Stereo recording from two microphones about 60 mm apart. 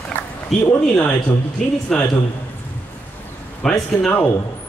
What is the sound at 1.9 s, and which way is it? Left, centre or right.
Speech, centre.